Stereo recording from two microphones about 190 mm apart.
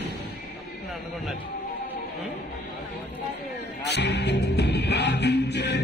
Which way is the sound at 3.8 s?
65° left (ahead or behind).